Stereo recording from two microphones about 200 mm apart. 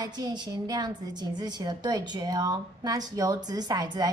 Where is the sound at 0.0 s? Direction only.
20° right (ahead or behind).